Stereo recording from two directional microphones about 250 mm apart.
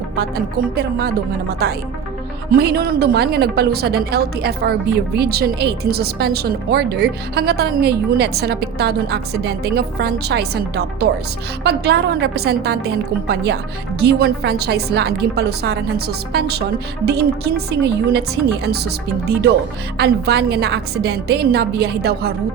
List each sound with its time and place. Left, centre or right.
0.2 s speech: right
20.0 s speech: right